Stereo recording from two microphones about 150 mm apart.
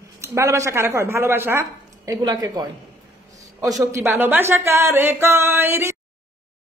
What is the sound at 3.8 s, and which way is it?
Speech, 20° right (ahead or behind).